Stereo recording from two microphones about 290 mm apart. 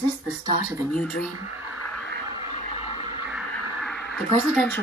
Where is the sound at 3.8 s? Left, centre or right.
Centre.